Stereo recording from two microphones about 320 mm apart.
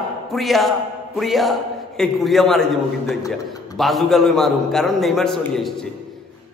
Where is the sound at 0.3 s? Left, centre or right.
Centre.